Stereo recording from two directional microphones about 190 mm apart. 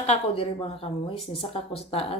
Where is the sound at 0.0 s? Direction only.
35° left (ahead or behind).